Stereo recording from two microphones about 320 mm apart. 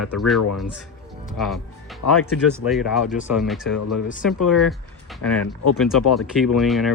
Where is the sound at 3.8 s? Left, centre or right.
Left.